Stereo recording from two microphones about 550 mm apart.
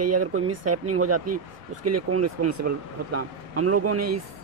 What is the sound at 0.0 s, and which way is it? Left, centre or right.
Speech, right.